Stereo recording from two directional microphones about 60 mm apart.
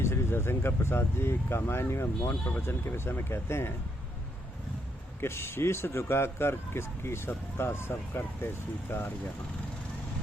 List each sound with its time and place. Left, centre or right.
0.0 s speech: left
5.2 s speech: left